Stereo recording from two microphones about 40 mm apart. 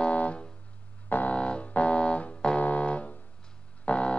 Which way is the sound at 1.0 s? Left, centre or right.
Left.